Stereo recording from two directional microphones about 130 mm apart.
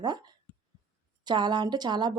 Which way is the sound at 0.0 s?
30° right (ahead or behind).